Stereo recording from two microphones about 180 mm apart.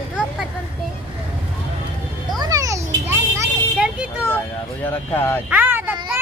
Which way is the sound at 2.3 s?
20° right (ahead or behind).